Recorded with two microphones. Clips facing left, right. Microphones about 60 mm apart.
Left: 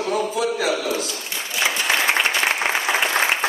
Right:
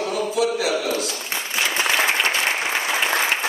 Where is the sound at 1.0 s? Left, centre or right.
Right.